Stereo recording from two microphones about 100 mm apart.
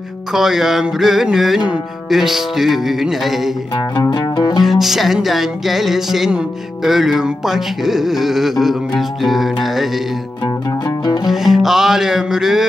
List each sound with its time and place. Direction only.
0.3 s music: 5° right (ahead or behind)
3.7 s music: 45° left (ahead or behind)
4.6 s music: centre (ahead or behind)
11.2 s music: 5° right (ahead or behind)